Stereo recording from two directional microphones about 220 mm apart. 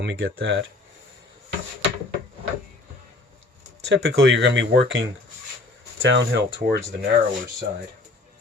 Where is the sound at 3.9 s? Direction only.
60° right (ahead or behind).